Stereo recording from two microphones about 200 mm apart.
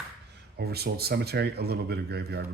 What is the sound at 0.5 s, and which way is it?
Speech, 55° right (ahead or behind).